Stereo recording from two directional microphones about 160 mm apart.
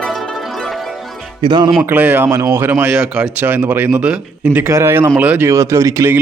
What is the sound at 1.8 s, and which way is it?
Speech, 10° right (ahead or behind).